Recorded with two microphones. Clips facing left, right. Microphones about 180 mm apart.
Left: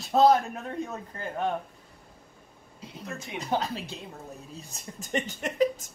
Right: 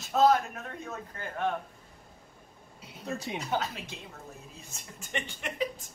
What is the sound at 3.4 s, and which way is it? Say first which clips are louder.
Speech: left 5 dB; 35° left (ahead or behind).